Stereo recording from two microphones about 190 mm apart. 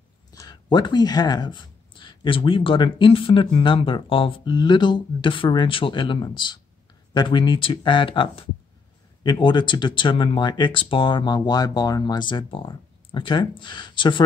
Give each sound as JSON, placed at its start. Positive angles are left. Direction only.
{"t": 0.3, "sound": "speech", "side_deg": 20}